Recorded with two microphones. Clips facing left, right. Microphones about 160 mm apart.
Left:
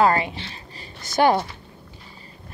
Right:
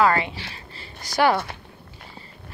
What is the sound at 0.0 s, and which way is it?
Speech, 25° left (ahead or behind).